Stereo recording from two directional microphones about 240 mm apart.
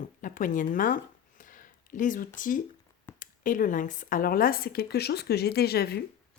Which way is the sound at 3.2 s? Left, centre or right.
Left.